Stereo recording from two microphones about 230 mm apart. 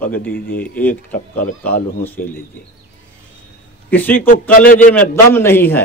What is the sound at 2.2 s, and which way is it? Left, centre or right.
Speech, left.